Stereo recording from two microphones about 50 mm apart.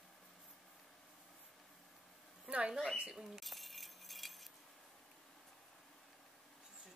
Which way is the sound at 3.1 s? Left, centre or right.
Centre.